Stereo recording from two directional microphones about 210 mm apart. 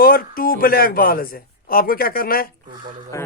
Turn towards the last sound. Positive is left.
turn(degrees=15)  # may be behind; listen again after turning